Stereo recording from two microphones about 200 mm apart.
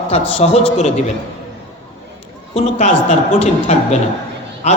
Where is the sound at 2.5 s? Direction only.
35° left (ahead or behind).